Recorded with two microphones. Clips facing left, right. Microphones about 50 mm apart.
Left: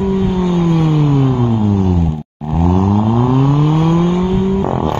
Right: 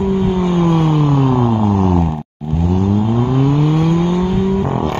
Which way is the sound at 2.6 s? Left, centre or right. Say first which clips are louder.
Left 2 dB; left.